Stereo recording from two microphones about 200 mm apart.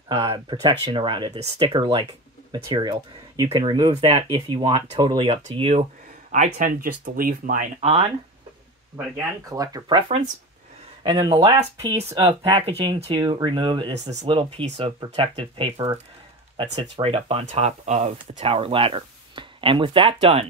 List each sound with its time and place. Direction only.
0.1 s speech: 20° right (ahead or behind)
6.3 s speech: 40° right (ahead or behind)
9.5 s speech: 20° right (ahead or behind)
11.1 s speech: 25° right (ahead or behind)
11.5 s speech: 15° right (ahead or behind)
12.3 s speech: 30° right (ahead or behind)